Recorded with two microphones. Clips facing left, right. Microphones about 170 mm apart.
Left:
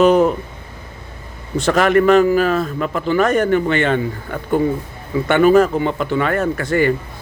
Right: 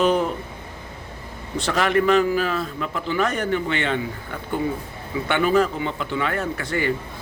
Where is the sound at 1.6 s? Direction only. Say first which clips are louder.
Left 6 dB; 50° left (ahead or behind).